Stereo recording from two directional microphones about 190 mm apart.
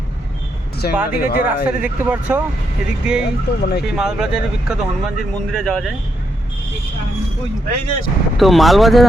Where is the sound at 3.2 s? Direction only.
55° left (ahead or behind).